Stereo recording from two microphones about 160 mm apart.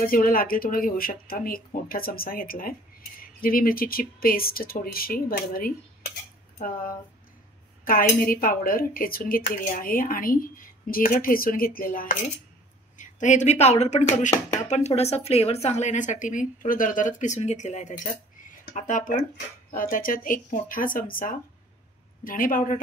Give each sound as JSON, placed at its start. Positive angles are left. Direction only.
{"t": 0.0, "sound": "speech", "side_deg": 65}
{"t": 12.9, "sound": "speech", "side_deg": 50}